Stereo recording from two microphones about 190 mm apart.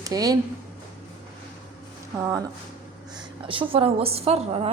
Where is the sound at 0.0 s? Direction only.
20° right (ahead or behind).